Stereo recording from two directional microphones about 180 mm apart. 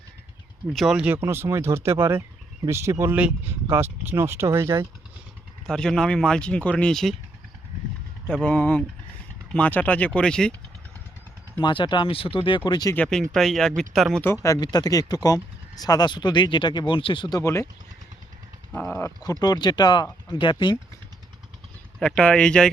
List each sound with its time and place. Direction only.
0.7 s speech: centre (ahead or behind)
5.6 s speech: 5° left (ahead or behind)
8.3 s speech: 5° left (ahead or behind)
11.6 s speech: 25° left (ahead or behind)
13.0 s speech: 5° left (ahead or behind)
14.4 s speech: 20° left (ahead or behind)
18.7 s speech: 10° left (ahead or behind); by 20.7 s 25° left (ahead or behind)
21.9 s speech: 5° left (ahead or behind)